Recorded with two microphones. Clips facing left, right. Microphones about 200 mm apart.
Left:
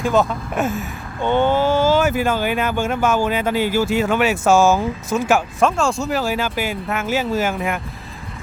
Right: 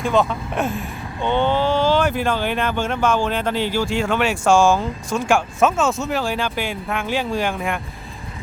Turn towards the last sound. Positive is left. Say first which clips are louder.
# left 2 dB
turn(degrees=5)  # may be behind; listen again after turning